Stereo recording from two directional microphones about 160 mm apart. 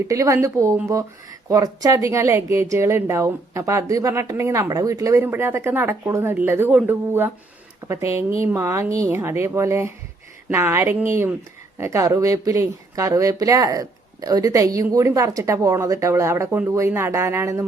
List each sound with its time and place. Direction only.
0.0 s speech: 20° right (ahead or behind)